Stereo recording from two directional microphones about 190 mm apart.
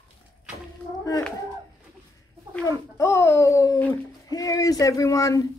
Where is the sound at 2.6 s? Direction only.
15° left (ahead or behind).